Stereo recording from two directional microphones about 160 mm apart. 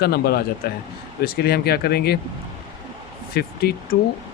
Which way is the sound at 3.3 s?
75° left (ahead or behind).